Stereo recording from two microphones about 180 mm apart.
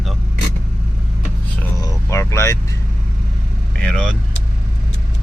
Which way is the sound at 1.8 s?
15° left (ahead or behind).